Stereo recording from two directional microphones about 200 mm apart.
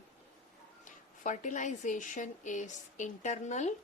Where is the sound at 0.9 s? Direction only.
40° left (ahead or behind).